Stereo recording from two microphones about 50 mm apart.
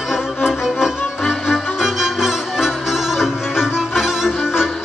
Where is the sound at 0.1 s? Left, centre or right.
Centre.